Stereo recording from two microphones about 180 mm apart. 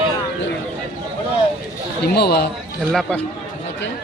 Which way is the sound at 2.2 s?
60° left (ahead or behind).